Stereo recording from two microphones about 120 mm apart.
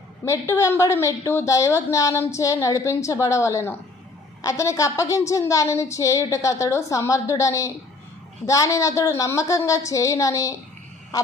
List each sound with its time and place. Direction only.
0.3 s a woman's voice: 25° left (ahead or behind)